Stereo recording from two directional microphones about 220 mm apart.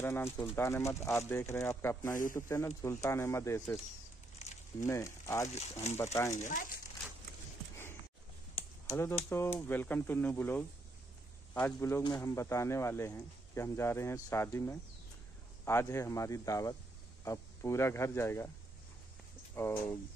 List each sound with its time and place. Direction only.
0.0 s speech: 10° left (ahead or behind)
4.8 s speech: 10° left (ahead or behind)
5.5 s speech: 30° left (ahead or behind)
8.6 s a sound: 25° left (ahead or behind)
8.9 s speech: 10° left (ahead or behind)
11.6 s a man's voice: 10° left (ahead or behind)
19.5 s speech: 10° left (ahead or behind)